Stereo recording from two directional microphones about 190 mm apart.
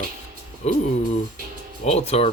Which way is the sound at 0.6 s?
35° left (ahead or behind).